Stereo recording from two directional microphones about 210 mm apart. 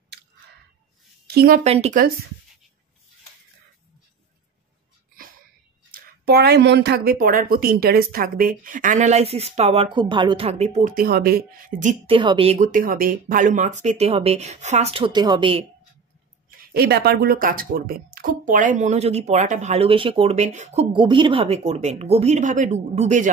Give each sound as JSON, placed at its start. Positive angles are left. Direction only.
{"t": 1.2, "sound": "a woman's voice", "side_deg": -45}
{"t": 1.6, "sound": "speech", "side_deg": -30}
{"t": 5.9, "sound": "speech", "side_deg": -50}
{"t": 12.2, "sound": "speech", "side_deg": -25}
{"t": 12.5, "sound": "speech", "side_deg": -40}
{"t": 16.4, "sound": "speech", "side_deg": -50}